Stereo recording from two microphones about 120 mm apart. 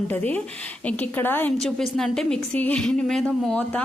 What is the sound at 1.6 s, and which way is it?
Speech, 5° left (ahead or behind).